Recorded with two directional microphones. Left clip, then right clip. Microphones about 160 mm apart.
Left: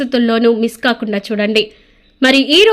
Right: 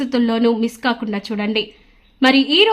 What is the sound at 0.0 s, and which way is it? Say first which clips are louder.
A woman's voice: left 5 dB; 10° left (ahead or behind).